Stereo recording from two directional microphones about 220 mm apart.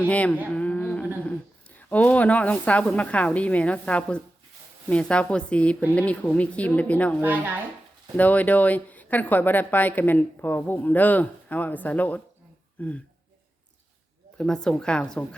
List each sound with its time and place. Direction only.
0.1 s a woman's voice: 5° left (ahead or behind)
7.2 s a woman's voice: 10° right (ahead or behind)
8.1 s speech: 5° left (ahead or behind)
14.3 s a woman's voice: 5° left (ahead or behind)